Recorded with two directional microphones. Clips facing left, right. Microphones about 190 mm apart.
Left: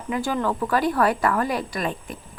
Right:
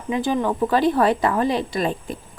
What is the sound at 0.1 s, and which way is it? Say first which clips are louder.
Speech: right 3 dB; 20° right (ahead or behind).